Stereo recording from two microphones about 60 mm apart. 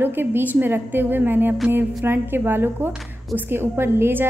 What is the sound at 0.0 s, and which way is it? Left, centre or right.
A woman's voice, right.